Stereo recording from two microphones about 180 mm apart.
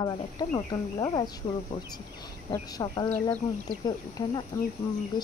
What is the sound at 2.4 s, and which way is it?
Speech, 20° left (ahead or behind).